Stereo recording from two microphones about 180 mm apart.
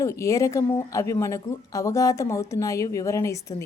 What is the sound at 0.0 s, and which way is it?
Speech, 15° left (ahead or behind).